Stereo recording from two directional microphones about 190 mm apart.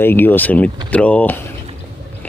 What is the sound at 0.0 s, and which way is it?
Speech, 10° left (ahead or behind).